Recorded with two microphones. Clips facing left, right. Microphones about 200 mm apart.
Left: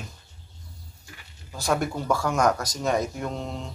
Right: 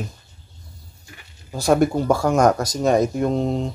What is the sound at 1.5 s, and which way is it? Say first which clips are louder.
Speech: right 9 dB; 35° right (ahead or behind).